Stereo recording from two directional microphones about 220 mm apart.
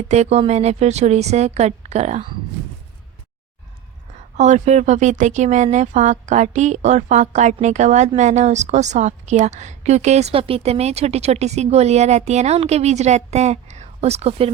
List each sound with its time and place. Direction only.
0.1 s speech: 30° right (ahead or behind)
4.4 s speech: 30° right (ahead or behind)